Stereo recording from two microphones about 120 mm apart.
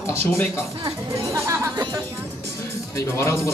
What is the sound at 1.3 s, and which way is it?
Music, 25° right (ahead or behind).